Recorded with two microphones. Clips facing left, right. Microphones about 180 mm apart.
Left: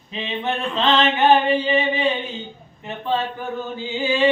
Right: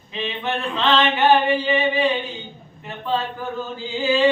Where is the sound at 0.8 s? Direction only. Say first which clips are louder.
Left 1 dB; 25° left (ahead or behind).